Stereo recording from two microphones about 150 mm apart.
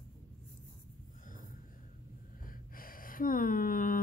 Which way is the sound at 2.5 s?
70° left (ahead or behind).